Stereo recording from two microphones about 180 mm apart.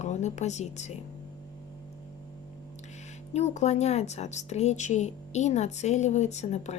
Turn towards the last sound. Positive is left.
turn(degrees=40)  # may be behind; listen again after turning